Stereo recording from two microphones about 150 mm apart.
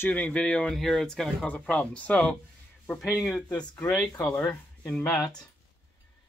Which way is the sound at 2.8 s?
20° left (ahead or behind).